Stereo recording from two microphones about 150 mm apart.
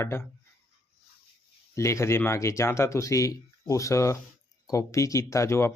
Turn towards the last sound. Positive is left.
turn(degrees=20)  # may be behind; listen again after turning